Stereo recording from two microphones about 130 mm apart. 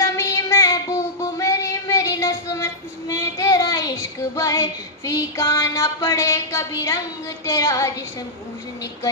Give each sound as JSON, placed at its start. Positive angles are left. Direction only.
{"t": 0.0, "sound": "child singing", "side_deg": 25}